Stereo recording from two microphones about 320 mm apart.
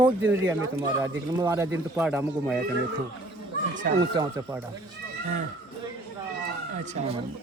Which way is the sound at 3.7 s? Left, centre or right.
Right.